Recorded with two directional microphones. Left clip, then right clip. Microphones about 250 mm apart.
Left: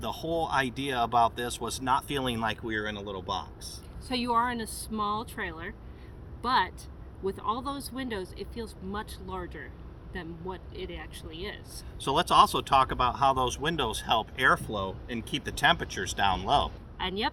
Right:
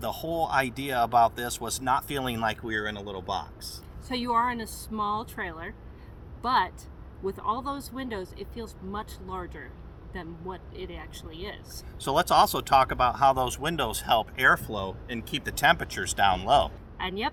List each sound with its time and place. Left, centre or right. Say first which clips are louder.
0.0 s speech: right 2 dB; centre
4.1 s speech: right 1 dB; centre
11.9 s speech: even; centre
17.0 s speech: even; centre